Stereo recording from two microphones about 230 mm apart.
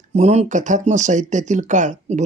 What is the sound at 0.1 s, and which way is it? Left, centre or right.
Speech, right.